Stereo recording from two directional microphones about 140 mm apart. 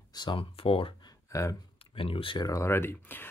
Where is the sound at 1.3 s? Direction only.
25° left (ahead or behind).